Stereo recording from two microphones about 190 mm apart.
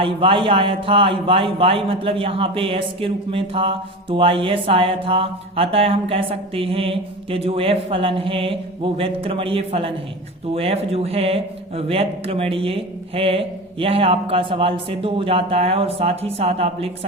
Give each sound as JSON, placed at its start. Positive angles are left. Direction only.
{"t": 0.0, "sound": "a man's voice", "side_deg": -25}